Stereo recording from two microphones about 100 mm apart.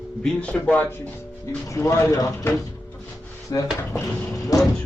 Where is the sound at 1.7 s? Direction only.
30° left (ahead or behind).